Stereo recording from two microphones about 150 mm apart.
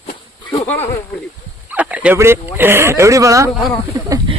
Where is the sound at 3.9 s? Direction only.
30° right (ahead or behind).